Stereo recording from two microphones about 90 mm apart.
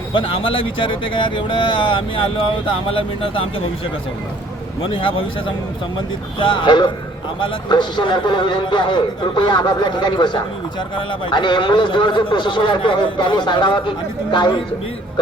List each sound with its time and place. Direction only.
0.1 s a man's voice: 90° left
4.8 s a man's voice: 80° left
6.4 s a man's voice: 65° left (ahead or behind)